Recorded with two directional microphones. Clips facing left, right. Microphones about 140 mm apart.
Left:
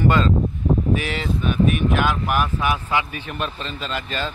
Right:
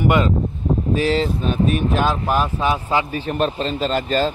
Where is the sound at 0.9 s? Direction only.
30° right (ahead or behind).